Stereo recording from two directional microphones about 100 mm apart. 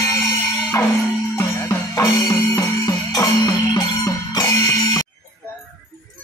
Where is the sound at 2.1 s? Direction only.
35° left (ahead or behind).